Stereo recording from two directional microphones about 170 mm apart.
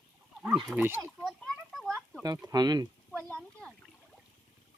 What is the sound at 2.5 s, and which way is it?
Speech, 25° right (ahead or behind).